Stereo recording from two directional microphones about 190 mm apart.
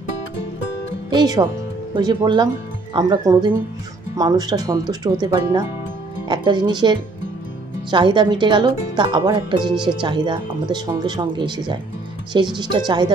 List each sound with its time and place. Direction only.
1.1 s speech: 20° right (ahead or behind)